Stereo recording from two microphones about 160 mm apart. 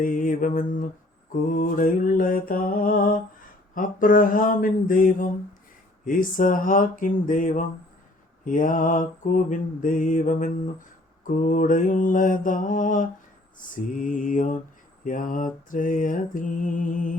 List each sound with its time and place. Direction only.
0.0 s mantra: 55° left (ahead or behind)